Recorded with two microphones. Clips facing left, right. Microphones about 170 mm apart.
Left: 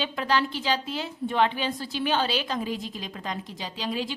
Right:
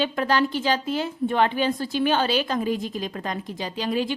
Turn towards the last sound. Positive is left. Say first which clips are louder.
# right 5 dB
turn(degrees=-55)  # may be behind; listen again after turning